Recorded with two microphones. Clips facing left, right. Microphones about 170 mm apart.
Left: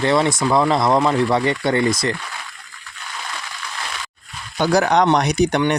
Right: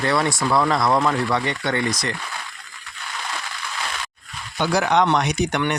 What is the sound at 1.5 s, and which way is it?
Speech, 35° left (ahead or behind).